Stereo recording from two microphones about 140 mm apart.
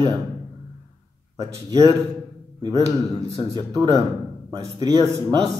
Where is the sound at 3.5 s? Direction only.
30° right (ahead or behind).